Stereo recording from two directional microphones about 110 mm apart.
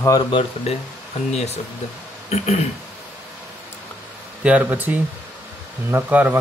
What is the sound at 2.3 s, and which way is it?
Speech, 90° left.